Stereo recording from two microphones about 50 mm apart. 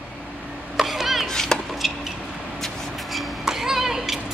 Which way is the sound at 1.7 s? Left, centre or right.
Centre.